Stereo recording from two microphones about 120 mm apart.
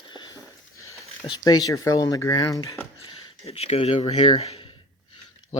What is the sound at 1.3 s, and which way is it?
Speech, 35° left (ahead or behind).